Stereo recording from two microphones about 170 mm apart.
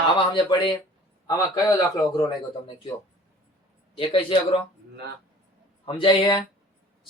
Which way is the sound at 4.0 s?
30° left (ahead or behind).